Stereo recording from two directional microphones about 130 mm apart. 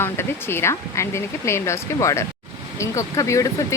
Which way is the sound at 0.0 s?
20° left (ahead or behind).